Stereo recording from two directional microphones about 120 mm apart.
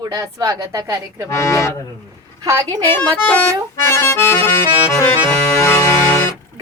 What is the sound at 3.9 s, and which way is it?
Accordion, 20° left (ahead or behind).